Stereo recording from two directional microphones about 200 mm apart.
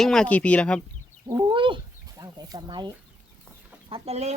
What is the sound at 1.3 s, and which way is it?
Speech, 20° right (ahead or behind).